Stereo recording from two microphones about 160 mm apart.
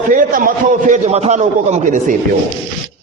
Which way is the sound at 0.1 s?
55° right (ahead or behind).